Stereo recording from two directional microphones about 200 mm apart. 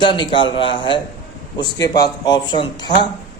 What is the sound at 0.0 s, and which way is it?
Speech, 25° left (ahead or behind).